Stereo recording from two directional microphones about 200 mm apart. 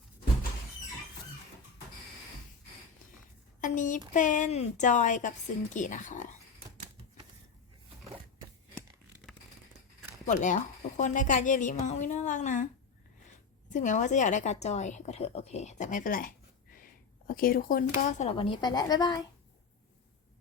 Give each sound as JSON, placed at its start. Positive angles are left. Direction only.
{"t": 3.6, "sound": "a woman's voice", "side_deg": 40}
{"t": 10.2, "sound": "a woman's voice", "side_deg": 40}
{"t": 13.7, "sound": "a woman's voice", "side_deg": 40}
{"t": 18.3, "sound": "a woman's voice", "side_deg": 25}